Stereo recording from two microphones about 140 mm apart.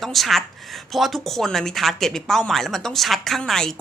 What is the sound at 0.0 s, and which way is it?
A woman's voice, centre (ahead or behind).